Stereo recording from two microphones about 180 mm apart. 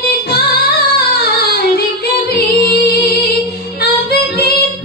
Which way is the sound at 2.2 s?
60° left (ahead or behind).